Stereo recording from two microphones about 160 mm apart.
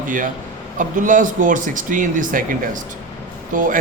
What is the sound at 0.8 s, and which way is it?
Speech, 55° right (ahead or behind).